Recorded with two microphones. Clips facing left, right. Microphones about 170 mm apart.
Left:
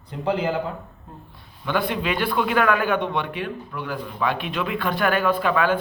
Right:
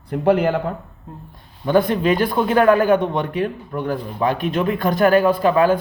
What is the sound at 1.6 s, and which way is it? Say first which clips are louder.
A man's voice: right 8 dB; 40° right (ahead or behind).